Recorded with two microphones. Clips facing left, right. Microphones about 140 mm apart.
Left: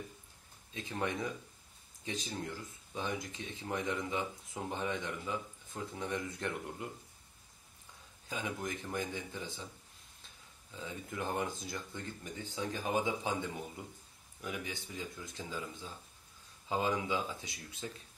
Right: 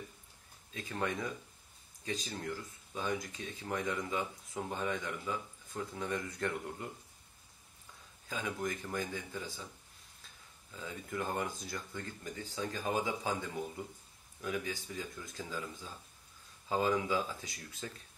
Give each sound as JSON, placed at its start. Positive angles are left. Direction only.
{"t": 0.7, "sound": "speech", "side_deg": 20}
{"t": 8.3, "sound": "speech", "side_deg": 20}
{"t": 10.7, "sound": "speech", "side_deg": 20}
{"t": 14.4, "sound": "speech", "side_deg": 20}